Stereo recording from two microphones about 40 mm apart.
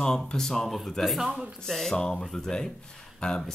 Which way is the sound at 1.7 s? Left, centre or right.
Centre.